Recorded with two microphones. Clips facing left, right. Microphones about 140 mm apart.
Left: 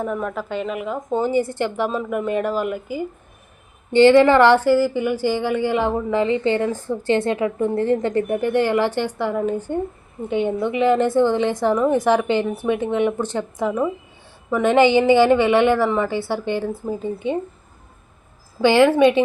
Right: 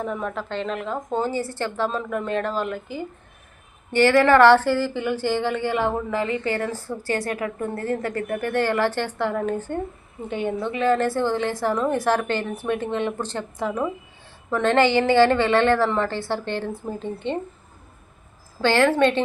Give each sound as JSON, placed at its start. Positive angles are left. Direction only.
{"t": 0.0, "sound": "a woman's voice", "side_deg": 5}
{"t": 3.9, "sound": "a woman's voice", "side_deg": 20}
{"t": 18.6, "sound": "a woman's voice", "side_deg": 15}